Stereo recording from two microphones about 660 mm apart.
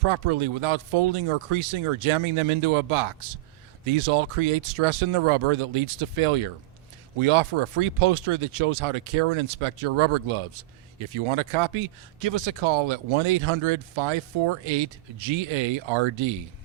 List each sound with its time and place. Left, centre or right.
0.0 s speech: right